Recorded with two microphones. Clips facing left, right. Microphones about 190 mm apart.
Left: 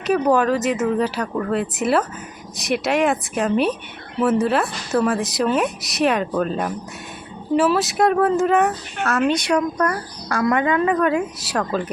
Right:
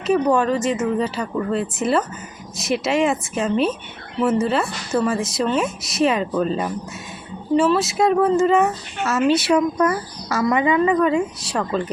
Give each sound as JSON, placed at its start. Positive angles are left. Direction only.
{"t": 0.1, "sound": "speech", "side_deg": 5}
{"t": 4.9, "sound": "speech", "side_deg": 5}